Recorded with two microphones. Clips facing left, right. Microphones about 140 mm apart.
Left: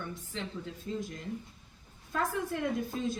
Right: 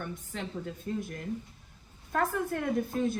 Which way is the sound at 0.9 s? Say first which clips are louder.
Right 2 dB; 55° right (ahead or behind).